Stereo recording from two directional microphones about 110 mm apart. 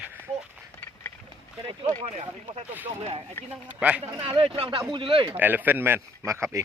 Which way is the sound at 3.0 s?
60° right (ahead or behind).